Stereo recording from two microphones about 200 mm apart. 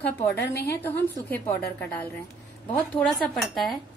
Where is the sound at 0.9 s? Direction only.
10° left (ahead or behind).